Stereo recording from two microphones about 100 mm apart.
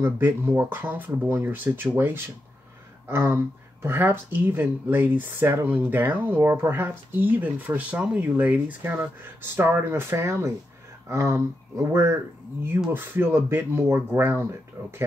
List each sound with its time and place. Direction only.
0.0 s speech: 25° right (ahead or behind)